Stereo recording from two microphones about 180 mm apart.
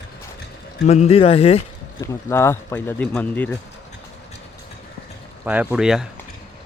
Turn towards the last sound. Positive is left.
turn(degrees=-5)  # may be behind; listen again after turning